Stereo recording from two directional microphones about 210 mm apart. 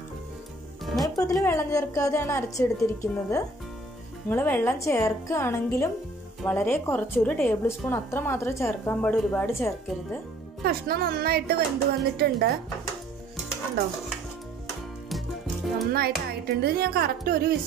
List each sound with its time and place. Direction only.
1.0 s a woman's voice: 15° left (ahead or behind)
10.6 s speech: 45° right (ahead or behind)
15.0 s music: centre (ahead or behind)
15.9 s speech: 45° right (ahead or behind)